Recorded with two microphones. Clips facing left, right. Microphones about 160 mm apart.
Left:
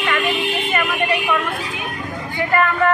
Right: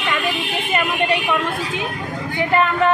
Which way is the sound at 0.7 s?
20° right (ahead or behind).